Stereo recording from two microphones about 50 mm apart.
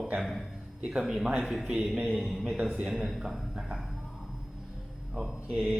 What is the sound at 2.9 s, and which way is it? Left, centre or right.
Speech, centre.